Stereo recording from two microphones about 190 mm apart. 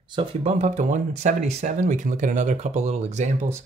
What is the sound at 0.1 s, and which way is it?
Speech, 25° right (ahead or behind).